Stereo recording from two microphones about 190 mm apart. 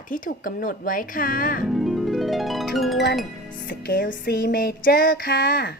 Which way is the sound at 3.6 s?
55° left (ahead or behind).